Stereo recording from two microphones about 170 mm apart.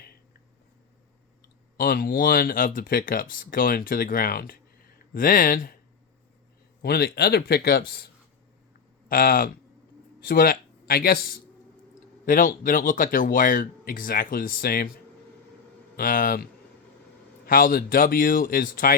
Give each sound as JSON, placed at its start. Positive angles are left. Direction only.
{"t": 1.7, "sound": "speech", "side_deg": 60}
{"t": 6.8, "sound": "speech", "side_deg": 65}
{"t": 16.0, "sound": "speech", "side_deg": 55}